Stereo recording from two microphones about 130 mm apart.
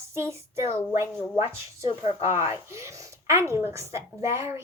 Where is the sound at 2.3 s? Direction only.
20° right (ahead or behind).